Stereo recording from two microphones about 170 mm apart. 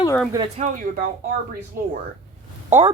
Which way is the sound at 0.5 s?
45° right (ahead or behind).